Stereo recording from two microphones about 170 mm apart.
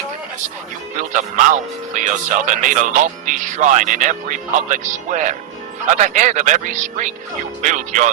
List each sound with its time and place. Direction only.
0.9 s speech: 50° right (ahead or behind)